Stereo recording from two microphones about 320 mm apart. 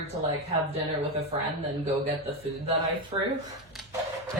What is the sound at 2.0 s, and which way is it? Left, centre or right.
Speech, centre.